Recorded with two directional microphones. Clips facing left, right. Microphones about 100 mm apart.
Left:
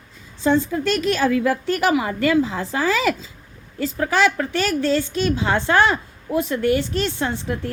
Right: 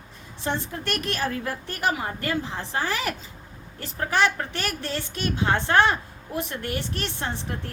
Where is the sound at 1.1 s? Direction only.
90° left.